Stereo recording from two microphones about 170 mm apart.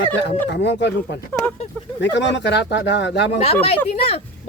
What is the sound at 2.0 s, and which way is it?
Speech, 90° left.